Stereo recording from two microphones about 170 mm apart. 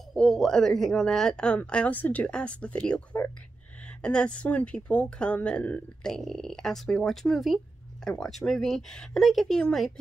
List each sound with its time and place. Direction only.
0.1 s speech: centre (ahead or behind)